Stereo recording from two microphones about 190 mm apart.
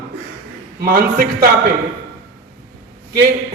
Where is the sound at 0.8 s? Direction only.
50° right (ahead or behind).